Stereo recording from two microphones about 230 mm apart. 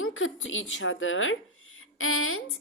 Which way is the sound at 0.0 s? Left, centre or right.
Left.